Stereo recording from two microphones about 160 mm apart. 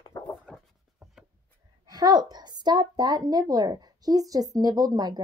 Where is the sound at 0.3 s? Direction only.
Centre (ahead or behind).